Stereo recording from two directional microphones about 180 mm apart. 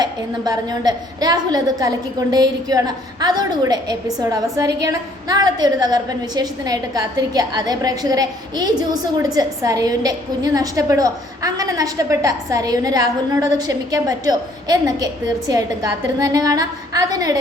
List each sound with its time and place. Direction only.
0.0 s a woman's voice: 20° right (ahead or behind)